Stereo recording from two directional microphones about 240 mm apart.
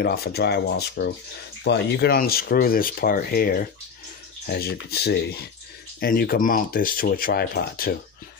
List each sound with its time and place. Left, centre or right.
0.0 s speech: left